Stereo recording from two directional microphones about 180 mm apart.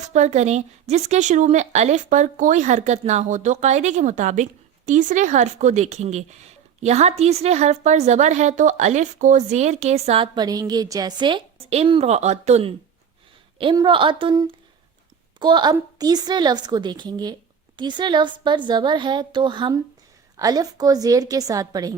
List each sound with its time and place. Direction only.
0.1 s a woman's voice: 40° right (ahead or behind); by 21.9 s 20° right (ahead or behind)